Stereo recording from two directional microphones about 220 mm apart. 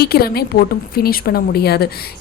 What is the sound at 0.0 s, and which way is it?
A woman's voice, 45° left (ahead or behind).